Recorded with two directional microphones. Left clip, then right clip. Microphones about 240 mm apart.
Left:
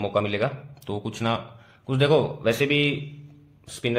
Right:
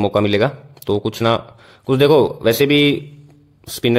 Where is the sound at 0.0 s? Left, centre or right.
Right.